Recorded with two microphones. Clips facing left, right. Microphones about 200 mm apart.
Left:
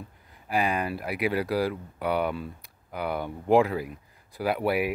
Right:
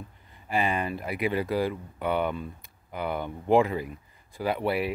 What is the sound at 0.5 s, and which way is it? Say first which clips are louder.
Speech: left 1 dB; centre (ahead or behind).